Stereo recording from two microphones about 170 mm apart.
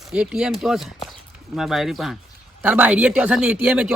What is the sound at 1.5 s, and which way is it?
Speech, centre (ahead or behind).